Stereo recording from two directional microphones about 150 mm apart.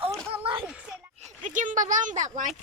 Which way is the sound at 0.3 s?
35° right (ahead or behind).